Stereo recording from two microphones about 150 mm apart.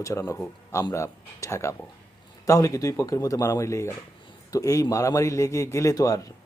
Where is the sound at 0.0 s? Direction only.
20° left (ahead or behind).